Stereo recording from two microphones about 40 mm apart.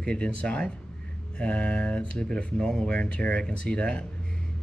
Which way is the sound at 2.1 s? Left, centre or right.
Centre.